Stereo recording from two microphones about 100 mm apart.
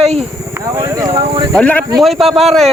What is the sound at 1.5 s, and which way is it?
Speech, 15° left (ahead or behind).